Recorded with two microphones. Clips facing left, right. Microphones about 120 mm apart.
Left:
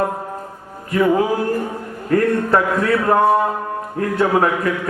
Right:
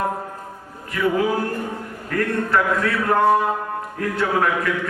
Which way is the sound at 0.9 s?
30° left (ahead or behind).